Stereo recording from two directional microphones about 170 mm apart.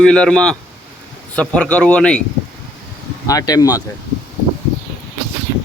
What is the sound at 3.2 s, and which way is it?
Speech, 20° left (ahead or behind).